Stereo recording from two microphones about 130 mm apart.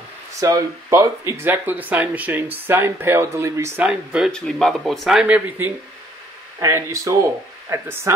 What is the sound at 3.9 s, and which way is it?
Speech, 5° right (ahead or behind).